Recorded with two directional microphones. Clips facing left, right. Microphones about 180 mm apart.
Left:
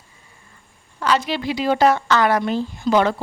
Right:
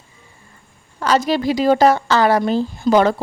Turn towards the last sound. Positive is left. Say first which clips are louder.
# right 3 dB
turn(degrees=-40)  # may be behind; listen again after turning